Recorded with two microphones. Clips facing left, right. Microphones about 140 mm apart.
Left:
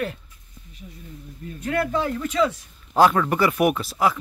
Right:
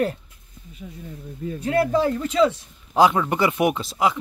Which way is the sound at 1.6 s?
30° right (ahead or behind).